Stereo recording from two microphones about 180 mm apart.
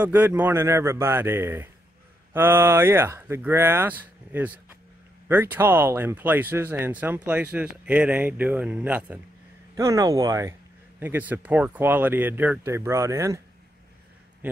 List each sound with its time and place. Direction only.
0.0 s speech: 10° right (ahead or behind)
9.8 s speech: 20° right (ahead or behind)